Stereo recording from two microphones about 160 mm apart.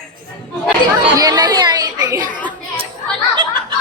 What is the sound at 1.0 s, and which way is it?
Speech, 25° right (ahead or behind).